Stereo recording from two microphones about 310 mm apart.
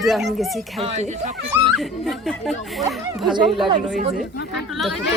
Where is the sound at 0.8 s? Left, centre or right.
Centre.